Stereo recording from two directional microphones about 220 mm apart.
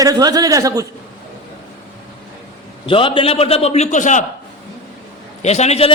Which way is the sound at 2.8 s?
25° left (ahead or behind).